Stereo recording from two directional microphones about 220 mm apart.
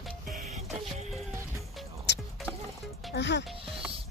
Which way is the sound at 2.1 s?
50° left (ahead or behind).